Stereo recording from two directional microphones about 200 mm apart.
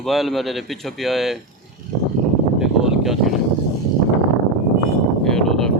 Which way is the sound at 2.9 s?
Centre (ahead or behind).